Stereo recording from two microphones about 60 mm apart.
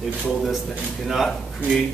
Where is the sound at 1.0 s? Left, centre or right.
Centre.